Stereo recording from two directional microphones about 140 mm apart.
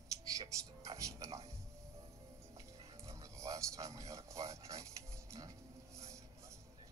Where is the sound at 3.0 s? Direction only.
20° right (ahead or behind).